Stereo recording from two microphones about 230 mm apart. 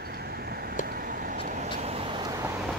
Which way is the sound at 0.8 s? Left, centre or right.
Right.